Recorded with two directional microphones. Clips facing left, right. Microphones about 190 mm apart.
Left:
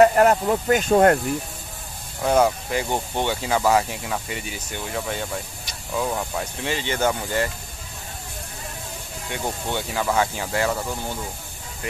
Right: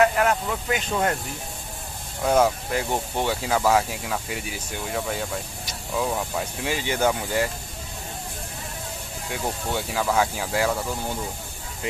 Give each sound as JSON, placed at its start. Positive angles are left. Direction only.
{"t": 0.0, "sound": "speech", "side_deg": 40}
{"t": 2.2, "sound": "speech", "side_deg": 0}
{"t": 9.3, "sound": "speech", "side_deg": 0}